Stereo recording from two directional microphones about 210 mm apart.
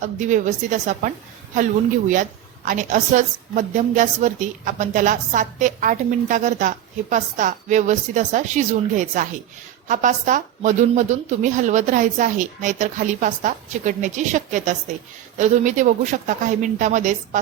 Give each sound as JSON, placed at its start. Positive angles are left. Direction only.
{"t": 0.0, "sound": "a woman's voice", "side_deg": -35}
{"t": 2.6, "sound": "a woman's voice", "side_deg": -35}